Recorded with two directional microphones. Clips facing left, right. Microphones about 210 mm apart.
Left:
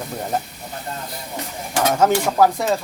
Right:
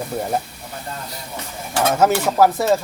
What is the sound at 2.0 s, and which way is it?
Speech, 5° right (ahead or behind).